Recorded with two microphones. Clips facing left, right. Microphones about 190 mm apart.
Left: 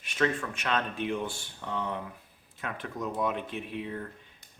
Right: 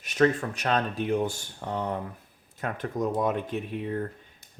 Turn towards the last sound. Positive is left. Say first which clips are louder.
# right 5 dB
turn(degrees=-45)  # may be behind; listen again after turning